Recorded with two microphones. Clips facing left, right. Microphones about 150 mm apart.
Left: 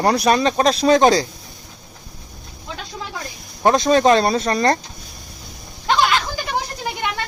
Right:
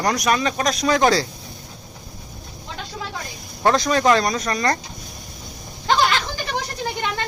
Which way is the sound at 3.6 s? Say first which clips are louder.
Left 3 dB; 25° left (ahead or behind).